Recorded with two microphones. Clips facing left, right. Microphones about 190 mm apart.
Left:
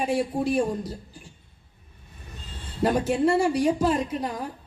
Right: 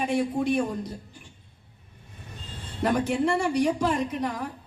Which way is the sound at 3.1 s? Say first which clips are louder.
Left 3 dB; 30° left (ahead or behind).